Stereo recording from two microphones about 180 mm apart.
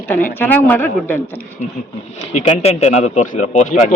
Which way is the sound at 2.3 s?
35° left (ahead or behind).